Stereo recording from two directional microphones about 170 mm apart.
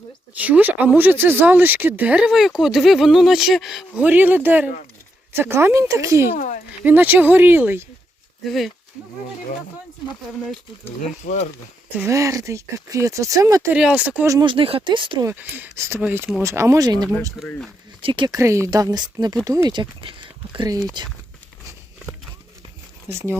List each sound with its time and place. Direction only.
0.3 s speech: 10° right (ahead or behind)
6.3 s speech: 45° left (ahead or behind)
6.8 s speech: 10° right (ahead or behind)
8.4 s speech: centre (ahead or behind)
11.2 s speech: 45° left (ahead or behind)
11.9 s speech: 15° right (ahead or behind)
13.7 s speech: 5° right (ahead or behind)
14.3 s speech: 20° right (ahead or behind)
14.5 s speech: 30° right (ahead or behind)
15.3 s speech: 10° right (ahead or behind)
17.4 s speech: 5° right (ahead or behind)
18.0 s speech: 30° right (ahead or behind)
18.3 s speech: 15° right (ahead or behind)
23.0 s speech: 15° right (ahead or behind)